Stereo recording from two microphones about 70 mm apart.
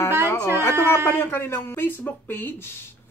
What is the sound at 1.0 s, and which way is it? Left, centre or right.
Speech, left.